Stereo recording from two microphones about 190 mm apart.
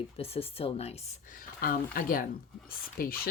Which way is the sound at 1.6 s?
50° left (ahead or behind).